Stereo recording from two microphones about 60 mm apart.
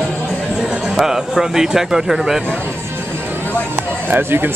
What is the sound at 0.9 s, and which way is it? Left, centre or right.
Speech, centre.